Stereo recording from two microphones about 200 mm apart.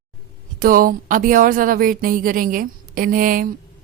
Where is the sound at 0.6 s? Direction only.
45° right (ahead or behind).